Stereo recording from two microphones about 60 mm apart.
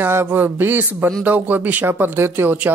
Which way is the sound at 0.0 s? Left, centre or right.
Right.